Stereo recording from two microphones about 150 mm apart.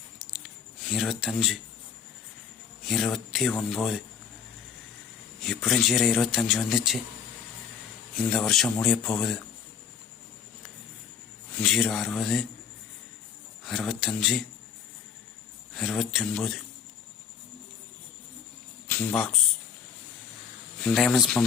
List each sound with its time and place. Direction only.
0.3 s a sound: 5° right (ahead or behind)
2.8 s a man's voice: centre (ahead or behind)
5.4 s a man's voice: centre (ahead or behind)
8.1 s a man's voice: 5° left (ahead or behind)
11.6 s a man's voice: centre (ahead or behind)
13.7 s a man's voice: centre (ahead or behind)
15.7 s a man's voice: centre (ahead or behind)
18.9 s speech: 10° left (ahead or behind)
20.8 s a man's voice: centre (ahead or behind)